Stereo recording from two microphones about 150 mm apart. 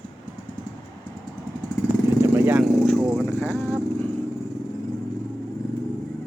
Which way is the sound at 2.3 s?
10° right (ahead or behind).